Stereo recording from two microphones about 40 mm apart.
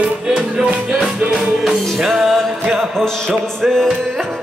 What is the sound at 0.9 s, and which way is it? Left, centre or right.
Music, centre.